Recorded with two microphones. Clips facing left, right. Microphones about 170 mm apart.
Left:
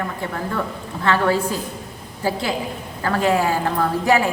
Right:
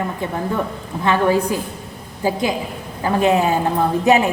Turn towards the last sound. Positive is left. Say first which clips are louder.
# right 3 dB
turn(degrees=-20)  # may be behind; listen again after turning